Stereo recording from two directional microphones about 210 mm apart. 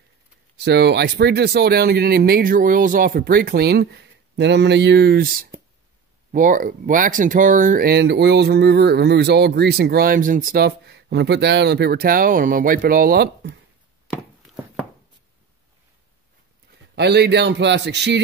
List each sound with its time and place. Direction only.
0.7 s speech: 55° right (ahead or behind)
14.4 s a sound: centre (ahead or behind)
16.9 s a man's voice: 50° right (ahead or behind)